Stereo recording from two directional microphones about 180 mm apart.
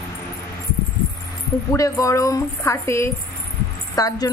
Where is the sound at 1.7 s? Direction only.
20° left (ahead or behind).